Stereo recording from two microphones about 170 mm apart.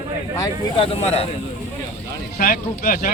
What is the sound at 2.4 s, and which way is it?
Speech, 55° left (ahead or behind).